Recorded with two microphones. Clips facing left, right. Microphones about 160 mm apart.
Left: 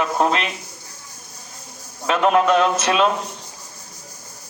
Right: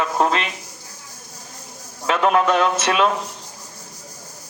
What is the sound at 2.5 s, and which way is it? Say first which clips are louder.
Speech: left 1 dB; 30° left (ahead or behind).